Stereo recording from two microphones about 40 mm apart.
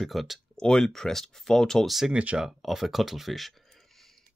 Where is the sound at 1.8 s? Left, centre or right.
Centre.